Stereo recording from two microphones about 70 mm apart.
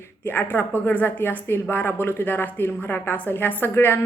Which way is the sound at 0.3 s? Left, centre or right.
Left.